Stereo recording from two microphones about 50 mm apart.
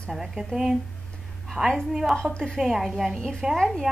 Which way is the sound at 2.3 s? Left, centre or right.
Centre.